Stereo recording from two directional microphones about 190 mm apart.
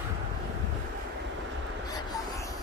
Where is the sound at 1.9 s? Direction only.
20° left (ahead or behind).